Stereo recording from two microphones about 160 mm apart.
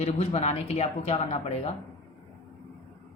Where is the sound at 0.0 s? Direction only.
40° left (ahead or behind).